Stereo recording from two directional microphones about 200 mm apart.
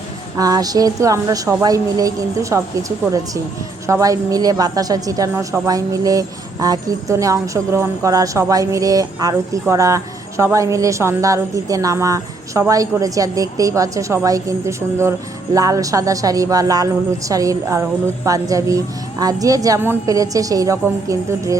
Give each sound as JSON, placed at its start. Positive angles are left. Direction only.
{"t": 0.3, "sound": "a woman's voice", "side_deg": -20}
{"t": 3.8, "sound": "a woman's voice", "side_deg": -15}